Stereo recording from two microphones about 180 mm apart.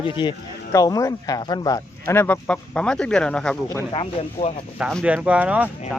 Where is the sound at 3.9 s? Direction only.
30° left (ahead or behind).